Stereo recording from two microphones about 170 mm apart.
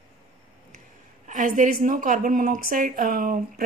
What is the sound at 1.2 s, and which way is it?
A woman's voice, 50° right (ahead or behind).